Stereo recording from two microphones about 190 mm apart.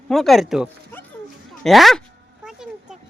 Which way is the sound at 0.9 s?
10° left (ahead or behind).